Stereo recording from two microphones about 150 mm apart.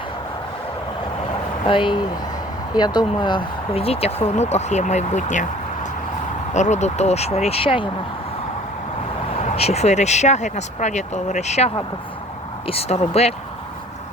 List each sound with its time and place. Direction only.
1.6 s speech: 35° left (ahead or behind)
9.6 s speech: 45° left (ahead or behind)